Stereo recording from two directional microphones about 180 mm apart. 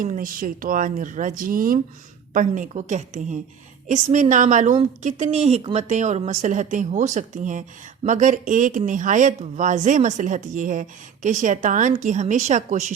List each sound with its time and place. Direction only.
0.0 s speech: 50° right (ahead or behind)